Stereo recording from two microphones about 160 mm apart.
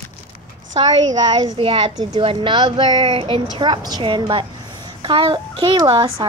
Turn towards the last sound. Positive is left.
turn(degrees=-30)  # may be behind; listen again after turning